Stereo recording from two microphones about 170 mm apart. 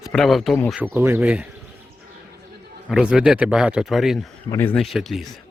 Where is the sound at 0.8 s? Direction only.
15° right (ahead or behind).